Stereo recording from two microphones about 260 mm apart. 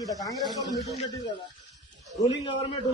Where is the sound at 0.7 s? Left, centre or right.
Centre.